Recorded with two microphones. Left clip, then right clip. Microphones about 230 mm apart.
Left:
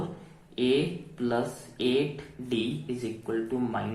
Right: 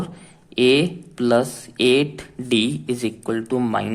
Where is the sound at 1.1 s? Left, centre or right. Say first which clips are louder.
Right 11 dB; right.